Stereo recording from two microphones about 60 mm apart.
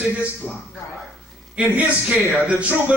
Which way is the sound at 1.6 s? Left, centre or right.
Right.